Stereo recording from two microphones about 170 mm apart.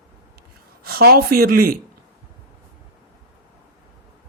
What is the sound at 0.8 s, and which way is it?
Speech, 60° right (ahead or behind).